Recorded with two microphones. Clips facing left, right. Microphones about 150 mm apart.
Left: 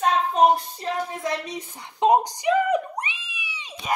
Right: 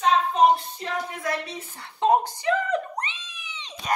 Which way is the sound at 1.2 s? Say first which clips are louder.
Left 1 dB; 20° left (ahead or behind).